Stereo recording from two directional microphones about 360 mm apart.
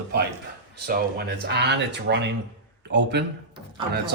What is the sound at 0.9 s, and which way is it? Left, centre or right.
Speech, right.